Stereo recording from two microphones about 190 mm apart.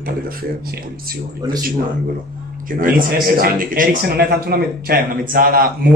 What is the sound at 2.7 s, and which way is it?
A man's voice, 45° right (ahead or behind).